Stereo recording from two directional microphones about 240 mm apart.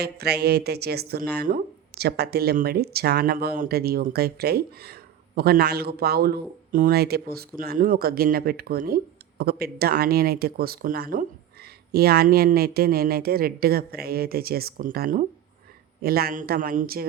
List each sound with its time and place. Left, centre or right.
0.0 s speech: right